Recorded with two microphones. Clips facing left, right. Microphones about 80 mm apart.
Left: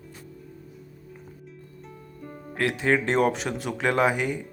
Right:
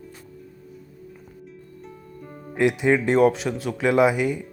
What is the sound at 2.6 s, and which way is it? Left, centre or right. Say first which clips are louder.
Speech: right 6 dB; centre.